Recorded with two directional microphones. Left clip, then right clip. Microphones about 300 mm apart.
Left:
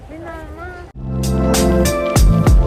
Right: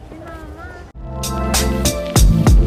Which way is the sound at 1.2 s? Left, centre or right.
Centre.